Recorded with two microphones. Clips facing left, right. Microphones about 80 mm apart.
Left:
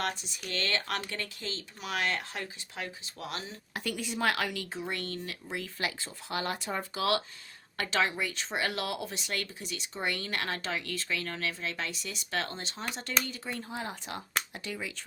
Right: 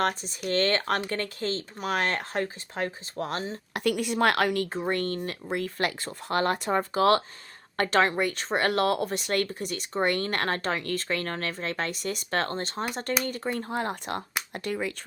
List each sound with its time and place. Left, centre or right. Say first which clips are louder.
0.0 s speech: right 7 dB; right
3.8 s speech: right 8 dB; right
6.9 s speech: right 8 dB; right